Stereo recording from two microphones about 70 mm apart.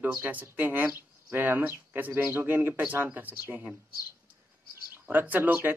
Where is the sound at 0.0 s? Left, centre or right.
Right.